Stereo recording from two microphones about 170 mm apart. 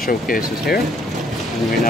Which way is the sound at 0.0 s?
55° left (ahead or behind).